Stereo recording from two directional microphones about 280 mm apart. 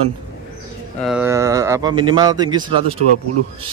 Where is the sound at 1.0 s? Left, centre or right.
Centre.